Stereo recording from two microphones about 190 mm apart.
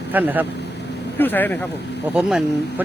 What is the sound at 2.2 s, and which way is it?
Speech, 5° right (ahead or behind).